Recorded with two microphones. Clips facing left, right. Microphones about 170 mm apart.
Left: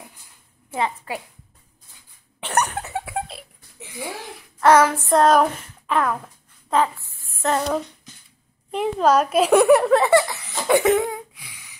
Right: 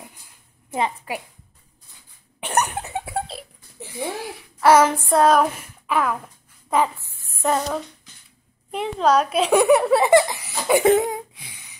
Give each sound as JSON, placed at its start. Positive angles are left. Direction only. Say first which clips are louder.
{"t": 0.7, "sound": "a woman's voice", "louder": "right 1 dB", "side_deg": -15}
{"t": 2.4, "sound": "a sound", "louder": "even", "side_deg": -15}
{"t": 3.1, "sound": "a sound", "louder": "right 1 dB", "side_deg": -35}
{"t": 4.4, "sound": "child singing", "louder": "even", "side_deg": -5}
{"t": 4.8, "sound": "a woman's voice", "louder": "right 1 dB", "side_deg": -15}
{"t": 5.1, "sound": "a child's voice", "louder": "left 1 dB", "side_deg": 0}
{"t": 8.7, "sound": "speech", "louder": "left 1 dB", "side_deg": 5}
{"t": 10.1, "sound": "laughter", "louder": "right 2 dB", "side_deg": -20}
{"t": 10.8, "sound": "a sound", "louder": "right 2 dB", "side_deg": -30}